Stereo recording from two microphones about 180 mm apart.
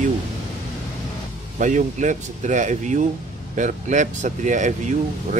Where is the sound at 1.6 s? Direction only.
45° right (ahead or behind).